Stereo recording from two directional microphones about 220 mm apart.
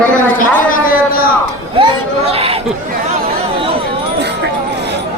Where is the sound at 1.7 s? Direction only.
25° right (ahead or behind).